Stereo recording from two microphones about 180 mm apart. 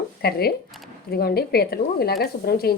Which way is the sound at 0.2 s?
60° left (ahead or behind).